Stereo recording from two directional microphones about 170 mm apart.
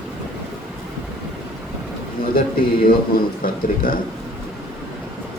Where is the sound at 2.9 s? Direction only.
60° left (ahead or behind).